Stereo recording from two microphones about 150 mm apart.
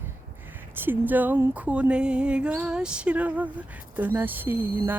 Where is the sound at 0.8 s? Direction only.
15° right (ahead or behind).